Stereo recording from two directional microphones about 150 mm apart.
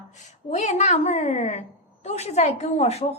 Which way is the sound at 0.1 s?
50° left (ahead or behind).